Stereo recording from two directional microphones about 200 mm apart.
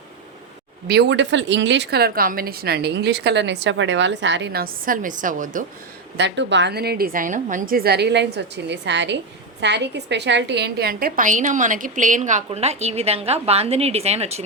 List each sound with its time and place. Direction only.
0.9 s a woman's voice: 55° right (ahead or behind); by 5.6 s 40° right (ahead or behind)
6.1 s a woman's voice: 65° right (ahead or behind); by 14.4 s 30° right (ahead or behind)